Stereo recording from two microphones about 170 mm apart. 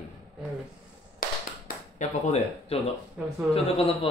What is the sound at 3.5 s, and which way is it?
Speech, 35° left (ahead or behind).